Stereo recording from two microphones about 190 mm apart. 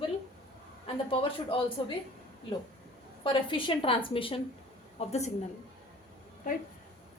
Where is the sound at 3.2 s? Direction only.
25° left (ahead or behind).